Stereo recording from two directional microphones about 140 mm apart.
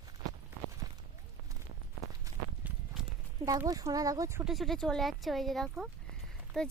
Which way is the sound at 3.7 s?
25° right (ahead or behind).